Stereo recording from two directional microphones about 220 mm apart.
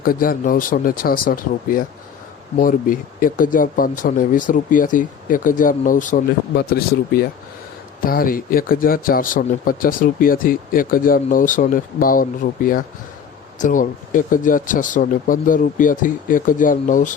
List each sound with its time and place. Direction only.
0.0 s speech: 40° left (ahead or behind)